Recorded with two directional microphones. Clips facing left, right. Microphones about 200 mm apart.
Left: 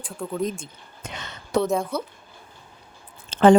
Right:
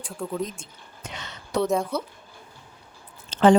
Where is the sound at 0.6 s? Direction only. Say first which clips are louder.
Left 2 dB; 55° left (ahead or behind).